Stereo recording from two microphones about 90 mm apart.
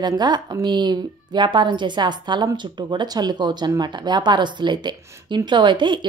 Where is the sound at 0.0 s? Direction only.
55° right (ahead or behind).